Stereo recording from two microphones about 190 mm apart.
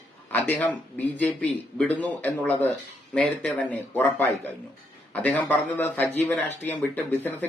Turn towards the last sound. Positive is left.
turn(degrees=10)  # may be behind; listen again after turning